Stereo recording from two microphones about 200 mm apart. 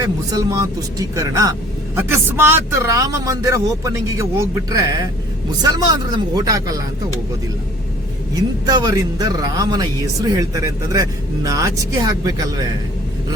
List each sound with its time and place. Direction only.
0.0 s speech: 20° right (ahead or behind)
8.4 s speech: 20° right (ahead or behind)